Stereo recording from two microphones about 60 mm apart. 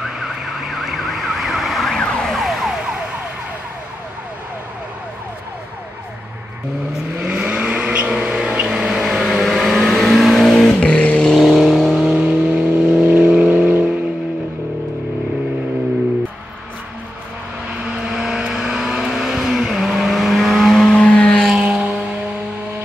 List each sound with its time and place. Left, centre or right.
0.0 s emergency vehicle: centre
2.0 s emergency vehicle: centre
7.2 s vehicle: centre
10.8 s vehicle: centre
11.2 s vehicle: centre
12.2 s vehicle: right
17.8 s vehicle: centre
21.5 s vehicle: centre